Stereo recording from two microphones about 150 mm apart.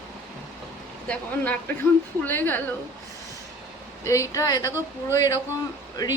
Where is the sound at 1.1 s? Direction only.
10° left (ahead or behind).